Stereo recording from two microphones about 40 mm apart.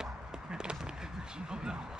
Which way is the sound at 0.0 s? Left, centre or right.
Right.